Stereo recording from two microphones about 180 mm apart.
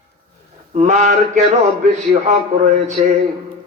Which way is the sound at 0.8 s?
40° right (ahead or behind).